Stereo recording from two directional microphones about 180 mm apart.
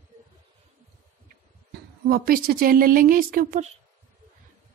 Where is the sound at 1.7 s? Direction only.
55° right (ahead or behind).